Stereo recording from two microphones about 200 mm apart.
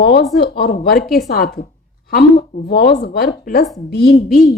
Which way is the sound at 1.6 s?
50° left (ahead or behind).